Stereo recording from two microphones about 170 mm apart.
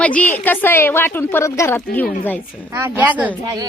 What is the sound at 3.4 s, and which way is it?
Speech, 25° right (ahead or behind).